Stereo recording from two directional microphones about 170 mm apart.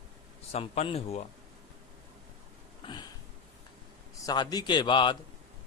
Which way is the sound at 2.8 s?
25° left (ahead or behind).